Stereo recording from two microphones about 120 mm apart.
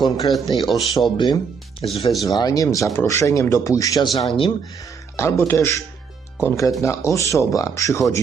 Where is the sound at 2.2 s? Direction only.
30° left (ahead or behind).